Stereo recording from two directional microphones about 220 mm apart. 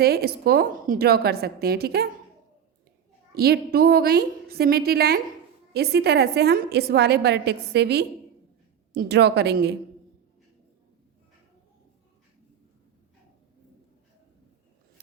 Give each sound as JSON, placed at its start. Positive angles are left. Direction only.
{"t": 0.0, "sound": "a woman's voice", "side_deg": -45}
{"t": 3.3, "sound": "a woman's voice", "side_deg": -45}